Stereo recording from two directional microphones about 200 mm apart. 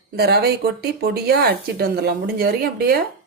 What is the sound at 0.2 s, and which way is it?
Speech, 50° right (ahead or behind).